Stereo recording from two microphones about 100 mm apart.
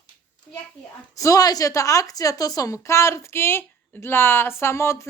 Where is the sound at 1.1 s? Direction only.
35° left (ahead or behind).